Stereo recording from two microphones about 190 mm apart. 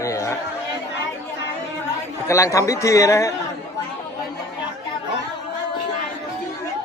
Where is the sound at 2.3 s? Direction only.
15° left (ahead or behind).